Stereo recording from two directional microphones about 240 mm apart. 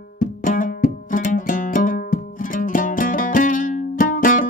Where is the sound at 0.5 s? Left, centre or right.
Left.